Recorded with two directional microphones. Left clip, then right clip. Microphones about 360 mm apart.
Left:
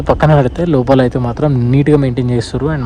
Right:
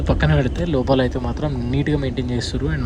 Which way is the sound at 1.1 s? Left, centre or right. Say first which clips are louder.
Left 9 dB; right.